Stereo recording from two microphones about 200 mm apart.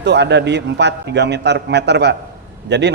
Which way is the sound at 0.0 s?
60° right (ahead or behind).